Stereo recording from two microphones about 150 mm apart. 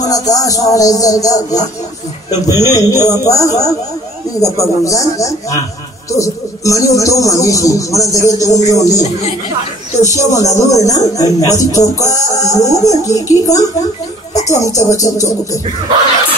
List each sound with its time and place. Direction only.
0.0 s a man's voice: 25° left (ahead or behind)
10.1 s a man's voice: 20° left (ahead or behind)
14.3 s a sound: 50° left (ahead or behind)
14.7 s a man's voice: 20° left (ahead or behind)